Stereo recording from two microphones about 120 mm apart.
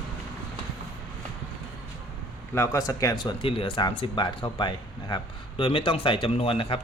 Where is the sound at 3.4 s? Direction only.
45° left (ahead or behind).